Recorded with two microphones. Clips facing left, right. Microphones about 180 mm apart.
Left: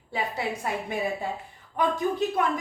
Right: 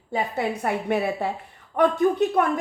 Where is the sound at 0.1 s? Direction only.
55° right (ahead or behind).